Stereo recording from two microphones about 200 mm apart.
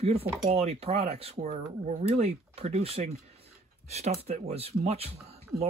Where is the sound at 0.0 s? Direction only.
30° right (ahead or behind).